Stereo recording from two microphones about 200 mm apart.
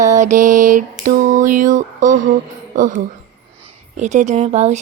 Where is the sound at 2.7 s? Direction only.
40° right (ahead or behind).